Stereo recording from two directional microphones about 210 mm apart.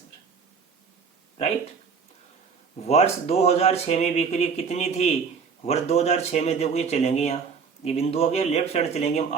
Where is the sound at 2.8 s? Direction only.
30° left (ahead or behind).